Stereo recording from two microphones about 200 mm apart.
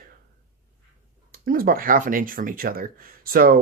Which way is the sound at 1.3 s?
45° right (ahead or behind).